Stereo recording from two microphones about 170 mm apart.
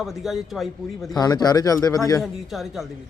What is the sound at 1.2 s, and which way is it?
A man's voice, 25° left (ahead or behind).